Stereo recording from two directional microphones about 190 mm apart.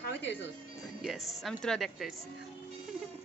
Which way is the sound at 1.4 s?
Centre (ahead or behind).